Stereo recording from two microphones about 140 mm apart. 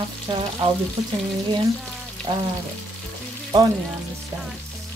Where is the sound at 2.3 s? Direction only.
35° right (ahead or behind).